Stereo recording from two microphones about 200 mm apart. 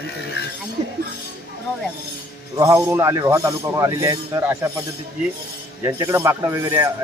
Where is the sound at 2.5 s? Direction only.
15° right (ahead or behind).